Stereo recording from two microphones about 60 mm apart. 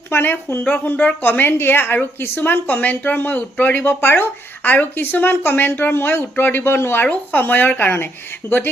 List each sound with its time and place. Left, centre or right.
0.1 s a woman's voice: left
0.6 s a woman's voice: left